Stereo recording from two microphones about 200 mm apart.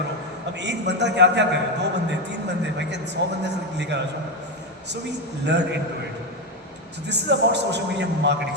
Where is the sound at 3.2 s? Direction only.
60° right (ahead or behind).